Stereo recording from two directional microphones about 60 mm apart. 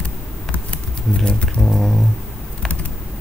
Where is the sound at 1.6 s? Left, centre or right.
Centre.